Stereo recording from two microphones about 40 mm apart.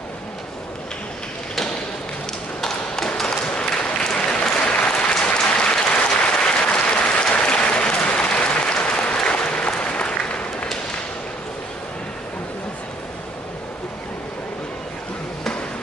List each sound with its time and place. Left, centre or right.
3.3 s applause: left